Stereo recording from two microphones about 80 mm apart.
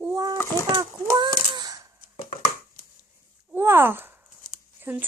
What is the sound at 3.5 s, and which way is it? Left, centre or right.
Speech, right.